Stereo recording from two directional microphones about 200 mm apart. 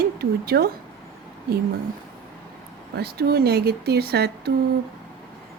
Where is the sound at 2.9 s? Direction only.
50° right (ahead or behind).